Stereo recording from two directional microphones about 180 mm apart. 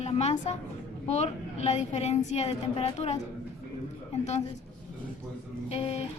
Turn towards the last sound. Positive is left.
turn(degrees=35)  # may be behind; listen again after turning